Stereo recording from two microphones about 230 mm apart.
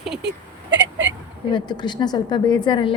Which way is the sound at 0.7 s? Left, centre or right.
Right.